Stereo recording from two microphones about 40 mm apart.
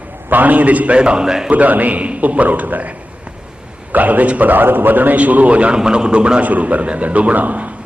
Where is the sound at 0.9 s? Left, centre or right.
Right.